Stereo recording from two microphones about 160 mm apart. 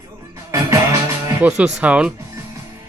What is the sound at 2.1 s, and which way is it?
Music, 15° right (ahead or behind).